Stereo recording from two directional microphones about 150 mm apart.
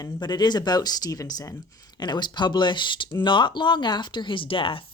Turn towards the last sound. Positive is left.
turn(degrees=35)  # may be behind; listen again after turning